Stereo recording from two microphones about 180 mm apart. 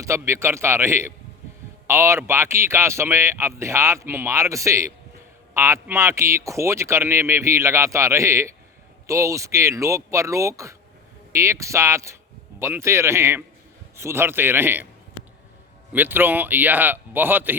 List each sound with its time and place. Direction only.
0.0 s speech: 15° right (ahead or behind)
15.9 s speech: 10° right (ahead or behind)